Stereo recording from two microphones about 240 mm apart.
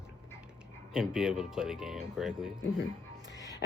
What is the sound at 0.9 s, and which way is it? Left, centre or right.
Speech, centre.